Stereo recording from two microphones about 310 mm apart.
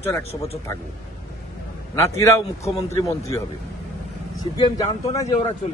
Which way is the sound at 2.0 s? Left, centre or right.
Centre.